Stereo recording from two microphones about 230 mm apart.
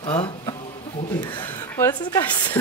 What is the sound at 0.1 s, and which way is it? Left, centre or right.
Speech, left.